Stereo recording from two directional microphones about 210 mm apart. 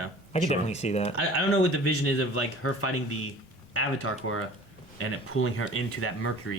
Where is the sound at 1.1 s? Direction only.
90° left.